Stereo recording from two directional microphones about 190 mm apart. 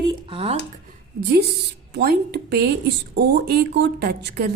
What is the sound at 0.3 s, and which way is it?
Speech, 30° right (ahead or behind).